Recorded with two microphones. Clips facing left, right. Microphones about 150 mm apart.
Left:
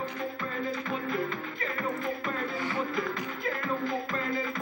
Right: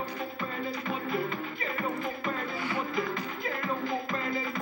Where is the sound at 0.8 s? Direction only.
10° right (ahead or behind).